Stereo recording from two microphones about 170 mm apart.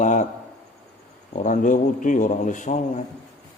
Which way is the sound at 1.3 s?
50° left (ahead or behind).